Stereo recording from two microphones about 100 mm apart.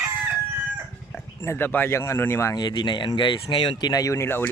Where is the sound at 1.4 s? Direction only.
25° left (ahead or behind).